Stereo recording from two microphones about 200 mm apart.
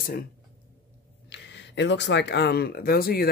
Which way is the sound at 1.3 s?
60° left (ahead or behind).